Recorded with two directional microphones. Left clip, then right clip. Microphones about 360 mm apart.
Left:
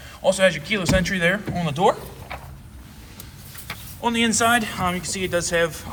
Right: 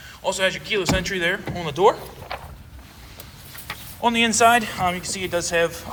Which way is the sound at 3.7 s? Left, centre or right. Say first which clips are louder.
Right 3 dB; centre.